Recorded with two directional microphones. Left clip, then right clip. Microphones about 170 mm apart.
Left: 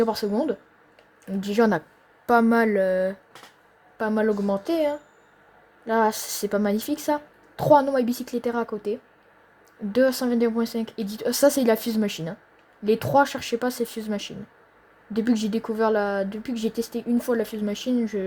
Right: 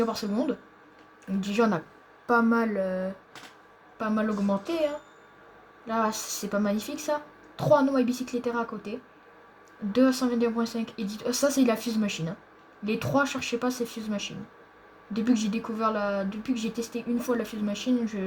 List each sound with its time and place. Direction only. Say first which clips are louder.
0.0 s speech: left 5 dB; 90° left